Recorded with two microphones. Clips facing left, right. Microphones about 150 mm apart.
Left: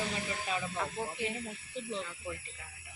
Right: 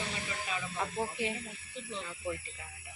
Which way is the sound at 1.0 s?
15° right (ahead or behind).